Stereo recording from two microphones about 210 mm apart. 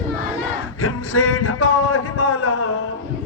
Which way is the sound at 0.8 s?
85° left.